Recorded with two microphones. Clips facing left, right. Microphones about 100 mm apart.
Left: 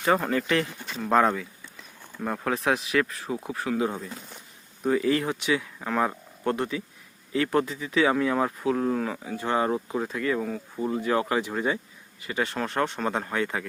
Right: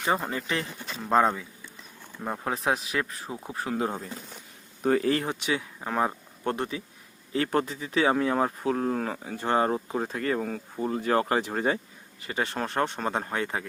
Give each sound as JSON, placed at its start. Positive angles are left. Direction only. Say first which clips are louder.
{"t": 0.1, "sound": "speech", "louder": "left 5 dB", "side_deg": -15}
{"t": 2.6, "sound": "speech", "louder": "left 3 dB", "side_deg": -25}
{"t": 4.8, "sound": "speech", "louder": "even", "side_deg": -50}
{"t": 5.3, "sound": "speech", "louder": "left 3 dB", "side_deg": -30}
{"t": 12.2, "sound": "speech", "louder": "left 1 dB", "side_deg": -35}